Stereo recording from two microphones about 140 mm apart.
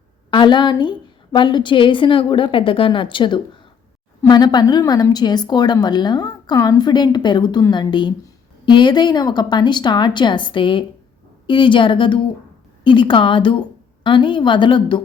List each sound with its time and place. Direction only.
0.3 s a woman's voice: 35° left (ahead or behind)